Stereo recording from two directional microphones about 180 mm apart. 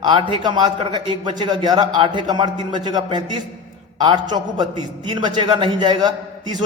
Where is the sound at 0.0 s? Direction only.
25° right (ahead or behind).